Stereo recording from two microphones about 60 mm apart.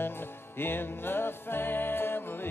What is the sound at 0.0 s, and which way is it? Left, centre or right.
Music, left.